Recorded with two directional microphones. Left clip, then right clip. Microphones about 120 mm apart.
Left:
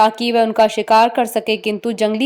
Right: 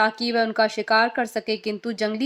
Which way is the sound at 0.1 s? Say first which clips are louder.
Left 7 dB; 50° left (ahead or behind).